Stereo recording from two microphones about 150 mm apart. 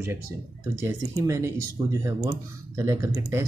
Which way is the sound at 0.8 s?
20° right (ahead or behind).